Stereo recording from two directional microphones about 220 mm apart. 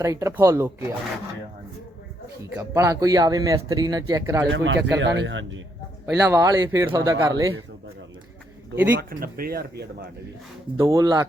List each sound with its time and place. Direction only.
0.0 s speech: 15° right (ahead or behind)
2.6 s speech: 10° right (ahead or behind)
4.5 s speech: 55° right (ahead or behind)
6.2 s speech: 15° right (ahead or behind)
9.0 s speech: 40° right (ahead or behind)
10.8 s speech: 15° right (ahead or behind)